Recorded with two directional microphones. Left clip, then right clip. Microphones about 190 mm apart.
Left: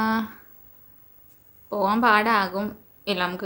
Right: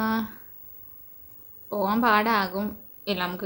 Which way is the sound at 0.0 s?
5° left (ahead or behind).